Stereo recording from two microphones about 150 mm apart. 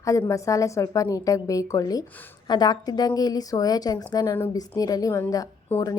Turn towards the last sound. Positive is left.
turn(degrees=25)  # may be behind; listen again after turning